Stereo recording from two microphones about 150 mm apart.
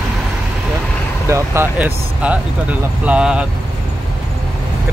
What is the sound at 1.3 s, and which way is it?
Speech, 15° right (ahead or behind).